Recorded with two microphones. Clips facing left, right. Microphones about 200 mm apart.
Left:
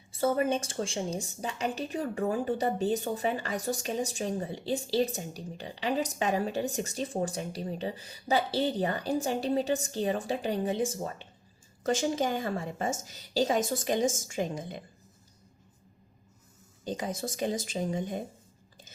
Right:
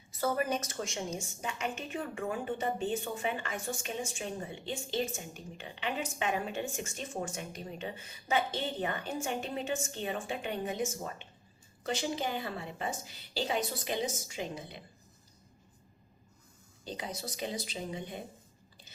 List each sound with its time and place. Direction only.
0.1 s a woman's voice: 25° left (ahead or behind)
11.8 s a woman's voice: 45° left (ahead or behind)
16.8 s a woman's voice: 45° left (ahead or behind)